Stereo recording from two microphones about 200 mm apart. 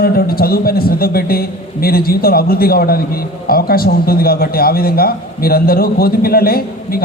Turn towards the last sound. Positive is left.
turn(degrees=50)  # may be behind; listen again after turning